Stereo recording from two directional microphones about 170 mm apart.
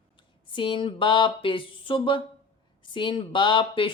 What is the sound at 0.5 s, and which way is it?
Speech, 30° left (ahead or behind).